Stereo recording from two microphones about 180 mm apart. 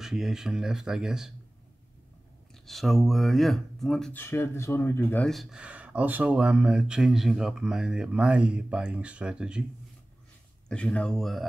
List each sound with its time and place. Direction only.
0.0 s speech: centre (ahead or behind)
2.6 s speech: centre (ahead or behind)
10.7 s speech: 5° left (ahead or behind)